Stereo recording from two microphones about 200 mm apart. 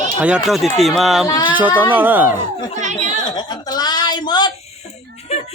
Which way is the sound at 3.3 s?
20° left (ahead or behind).